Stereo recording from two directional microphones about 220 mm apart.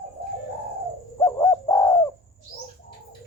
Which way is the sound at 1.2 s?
15° left (ahead or behind).